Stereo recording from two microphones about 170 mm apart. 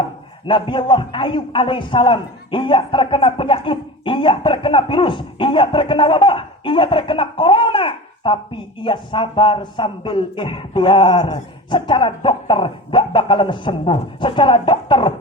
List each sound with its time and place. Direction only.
0.4 s a man's voice: 30° left (ahead or behind)